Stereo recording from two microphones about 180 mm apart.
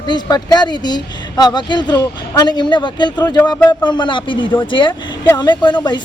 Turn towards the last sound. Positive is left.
turn(degrees=25)  # may be behind; listen again after turning